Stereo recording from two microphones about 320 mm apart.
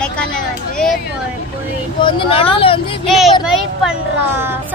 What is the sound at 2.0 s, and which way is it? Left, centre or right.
Speech, centre.